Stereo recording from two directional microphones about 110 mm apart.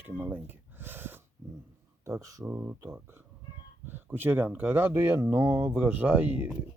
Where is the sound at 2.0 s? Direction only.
30° right (ahead or behind).